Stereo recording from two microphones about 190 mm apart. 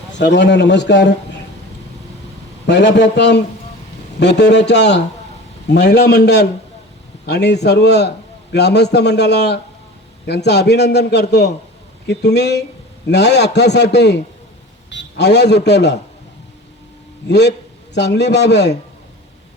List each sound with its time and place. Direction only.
0.2 s a man's voice: 65° left (ahead or behind)
2.6 s a man's voice: 65° left (ahead or behind)
17.2 s a man's voice: 65° left (ahead or behind)